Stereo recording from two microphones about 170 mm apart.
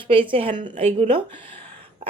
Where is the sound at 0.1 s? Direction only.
30° right (ahead or behind).